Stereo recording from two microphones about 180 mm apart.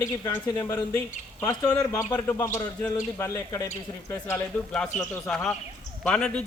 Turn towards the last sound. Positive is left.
turn(degrees=5)  # may be behind; listen again after turning